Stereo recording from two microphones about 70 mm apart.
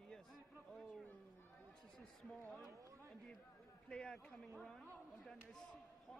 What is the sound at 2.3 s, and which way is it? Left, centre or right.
Speech, centre.